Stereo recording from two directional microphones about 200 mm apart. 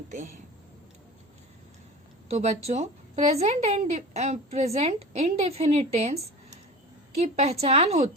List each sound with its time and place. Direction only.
2.3 s a woman's voice: 35° right (ahead or behind)